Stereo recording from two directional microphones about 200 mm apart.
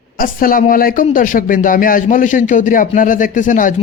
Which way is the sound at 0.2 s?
45° left (ahead or behind).